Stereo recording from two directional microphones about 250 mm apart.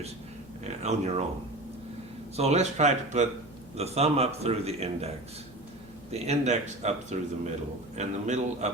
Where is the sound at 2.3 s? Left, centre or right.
Right.